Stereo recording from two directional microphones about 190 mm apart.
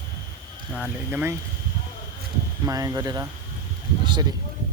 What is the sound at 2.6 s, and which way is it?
Speech, 20° right (ahead or behind).